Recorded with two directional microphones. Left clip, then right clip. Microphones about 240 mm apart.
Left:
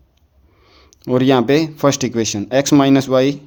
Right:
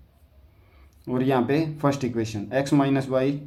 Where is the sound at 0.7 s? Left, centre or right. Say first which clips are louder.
Left 11 dB; left.